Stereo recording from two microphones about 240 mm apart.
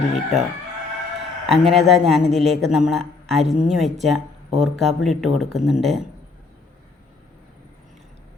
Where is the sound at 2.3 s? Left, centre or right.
Right.